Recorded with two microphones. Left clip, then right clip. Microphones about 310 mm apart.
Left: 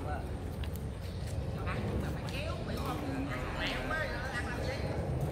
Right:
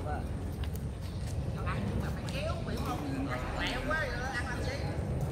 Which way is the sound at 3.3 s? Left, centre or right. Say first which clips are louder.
Right 2 dB; centre.